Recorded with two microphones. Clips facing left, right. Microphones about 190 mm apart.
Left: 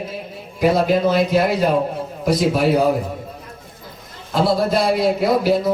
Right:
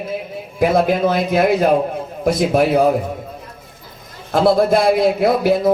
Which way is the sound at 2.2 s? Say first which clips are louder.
Right 2 dB; 50° right (ahead or behind).